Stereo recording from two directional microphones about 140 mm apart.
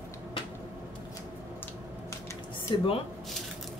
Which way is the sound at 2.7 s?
35° left (ahead or behind).